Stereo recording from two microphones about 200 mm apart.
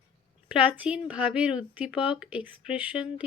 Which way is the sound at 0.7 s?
5° right (ahead or behind).